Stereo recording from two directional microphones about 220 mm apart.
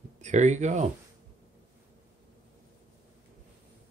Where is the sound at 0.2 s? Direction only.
30° right (ahead or behind).